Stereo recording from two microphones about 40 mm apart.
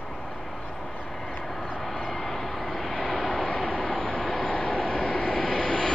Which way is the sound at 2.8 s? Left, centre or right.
Centre.